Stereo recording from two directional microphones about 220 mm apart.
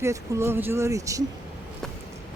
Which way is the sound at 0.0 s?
10° right (ahead or behind).